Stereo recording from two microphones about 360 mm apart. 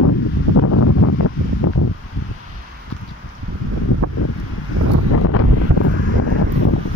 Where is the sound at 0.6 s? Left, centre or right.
Left.